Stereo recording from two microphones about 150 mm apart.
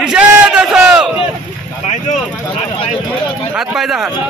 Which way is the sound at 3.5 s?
5° right (ahead or behind).